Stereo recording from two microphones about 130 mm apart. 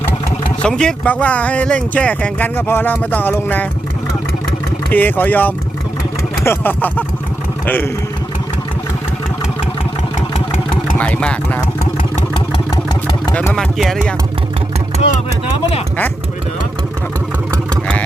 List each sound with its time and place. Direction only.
0.6 s speech: 5° left (ahead or behind)
4.9 s a man's voice: 15° left (ahead or behind)
10.3 s vehicle: 60° left (ahead or behind)
10.9 s speech: 10° left (ahead or behind)
13.3 s speech: 10° left (ahead or behind)
13.7 s speech: centre (ahead or behind)